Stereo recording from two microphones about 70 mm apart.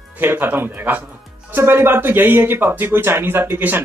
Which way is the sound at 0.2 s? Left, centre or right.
Right.